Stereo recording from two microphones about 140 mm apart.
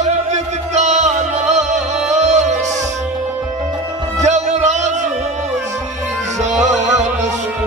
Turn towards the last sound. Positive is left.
turn(degrees=-55)  # may be behind; listen again after turning